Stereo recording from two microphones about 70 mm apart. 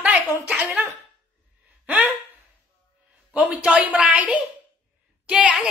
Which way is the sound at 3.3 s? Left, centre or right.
Centre.